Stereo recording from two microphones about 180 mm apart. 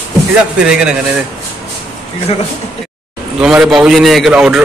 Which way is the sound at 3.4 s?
5° right (ahead or behind).